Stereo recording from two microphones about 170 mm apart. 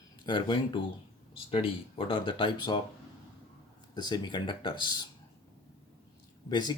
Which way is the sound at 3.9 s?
25° left (ahead or behind).